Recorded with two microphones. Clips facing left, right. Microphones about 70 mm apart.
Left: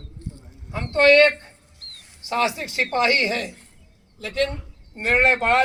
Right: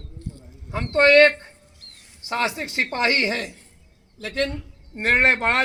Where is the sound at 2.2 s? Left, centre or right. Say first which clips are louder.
Left 2 dB; right.